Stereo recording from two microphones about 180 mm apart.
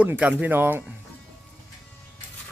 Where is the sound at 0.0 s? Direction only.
10° right (ahead or behind).